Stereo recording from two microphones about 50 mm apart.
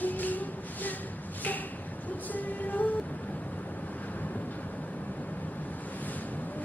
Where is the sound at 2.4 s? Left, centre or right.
Left.